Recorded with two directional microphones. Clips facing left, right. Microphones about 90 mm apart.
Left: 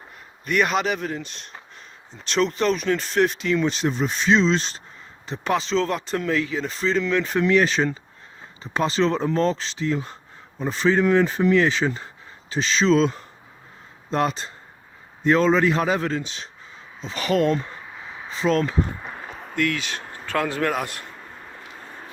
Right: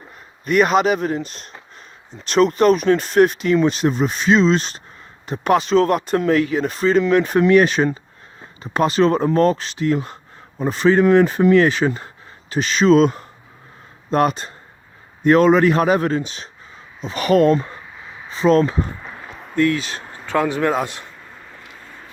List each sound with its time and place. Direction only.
0.4 s speech: 40° right (ahead or behind)
19.1 s a sound: centre (ahead or behind)
19.5 s speech: 35° right (ahead or behind)
20.1 s speech: 10° right (ahead or behind)